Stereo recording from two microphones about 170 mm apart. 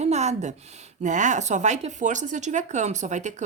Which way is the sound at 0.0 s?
40° right (ahead or behind).